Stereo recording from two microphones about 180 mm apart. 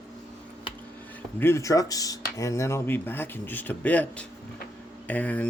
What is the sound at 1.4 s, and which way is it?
Speech, 15° left (ahead or behind).